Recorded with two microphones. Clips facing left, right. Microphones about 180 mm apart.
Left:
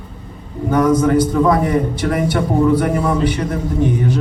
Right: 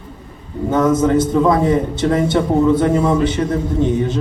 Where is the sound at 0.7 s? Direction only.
25° right (ahead or behind).